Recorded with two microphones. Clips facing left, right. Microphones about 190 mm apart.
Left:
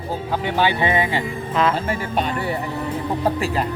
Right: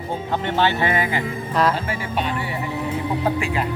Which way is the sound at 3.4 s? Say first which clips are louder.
Left 1 dB; 35° left (ahead or behind).